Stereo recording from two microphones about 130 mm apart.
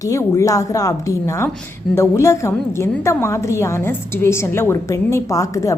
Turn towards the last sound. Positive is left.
turn(degrees=25)  # may be behind; listen again after turning